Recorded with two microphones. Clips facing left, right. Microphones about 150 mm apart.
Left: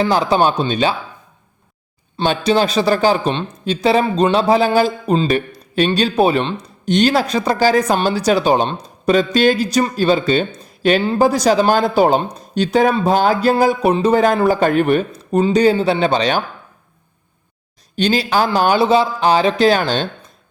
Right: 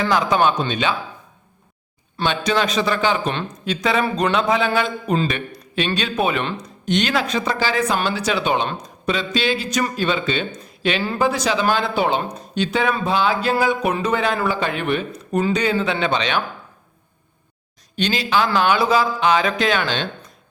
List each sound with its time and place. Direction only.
0.0 s a man's voice: 30° left (ahead or behind)
2.2 s a man's voice: 35° left (ahead or behind)
15.1 s a man's voice: 30° left (ahead or behind)
17.9 s a man's voice: 35° left (ahead or behind)